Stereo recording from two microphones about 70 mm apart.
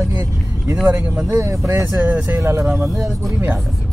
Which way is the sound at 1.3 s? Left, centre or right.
Right.